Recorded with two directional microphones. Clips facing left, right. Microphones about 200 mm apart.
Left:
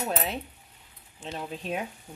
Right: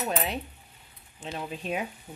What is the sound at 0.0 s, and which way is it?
Speech, 5° left (ahead or behind).